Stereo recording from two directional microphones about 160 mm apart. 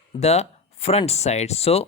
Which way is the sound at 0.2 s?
40° left (ahead or behind).